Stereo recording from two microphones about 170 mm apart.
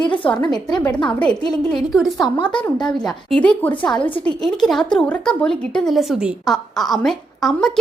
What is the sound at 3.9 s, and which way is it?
Speech, 30° left (ahead or behind).